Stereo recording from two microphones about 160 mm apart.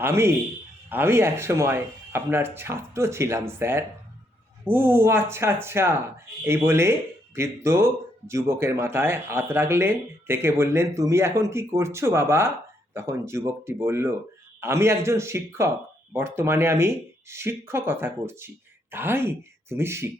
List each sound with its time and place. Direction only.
0.0 s speech: 15° right (ahead or behind)